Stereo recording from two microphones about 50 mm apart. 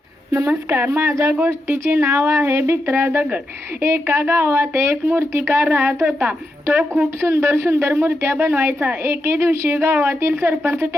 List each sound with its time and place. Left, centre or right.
0.3 s a woman's voice: right
0.9 s a woman's voice: right
5.6 s a woman's voice: right
7.2 s a woman's voice: right